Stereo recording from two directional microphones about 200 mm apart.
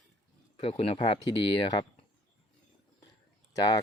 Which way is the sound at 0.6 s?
25° left (ahead or behind).